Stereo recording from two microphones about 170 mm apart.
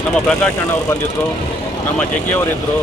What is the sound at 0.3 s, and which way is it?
Speech, 10° left (ahead or behind).